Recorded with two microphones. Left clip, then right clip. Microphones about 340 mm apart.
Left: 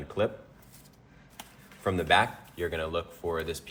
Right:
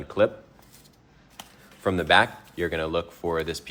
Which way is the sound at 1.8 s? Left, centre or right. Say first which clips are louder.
Right 4 dB; right.